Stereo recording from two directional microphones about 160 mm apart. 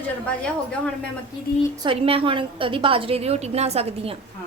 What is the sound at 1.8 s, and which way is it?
A woman's voice, 35° right (ahead or behind).